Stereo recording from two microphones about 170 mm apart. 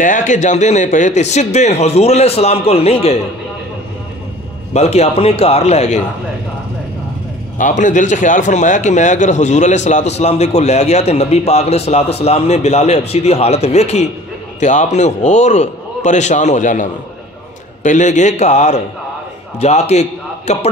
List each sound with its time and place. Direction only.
0.0 s a man's voice: 50° left (ahead or behind)
4.7 s a man's voice: 40° left (ahead or behind)
7.5 s a man's voice: 50° left (ahead or behind)